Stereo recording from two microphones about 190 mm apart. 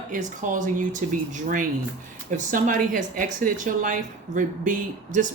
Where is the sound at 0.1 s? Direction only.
40° right (ahead or behind).